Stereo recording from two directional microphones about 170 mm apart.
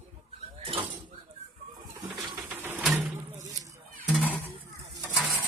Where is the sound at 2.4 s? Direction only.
10° right (ahead or behind).